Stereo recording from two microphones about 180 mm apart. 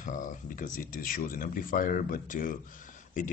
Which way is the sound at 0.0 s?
45° left (ahead or behind).